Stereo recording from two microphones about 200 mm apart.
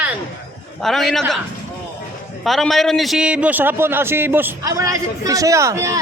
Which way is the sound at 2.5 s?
Centre (ahead or behind).